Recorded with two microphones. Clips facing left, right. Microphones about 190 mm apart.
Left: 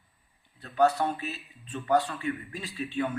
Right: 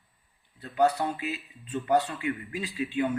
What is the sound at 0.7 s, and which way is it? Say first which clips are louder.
Speech: even; 15° right (ahead or behind).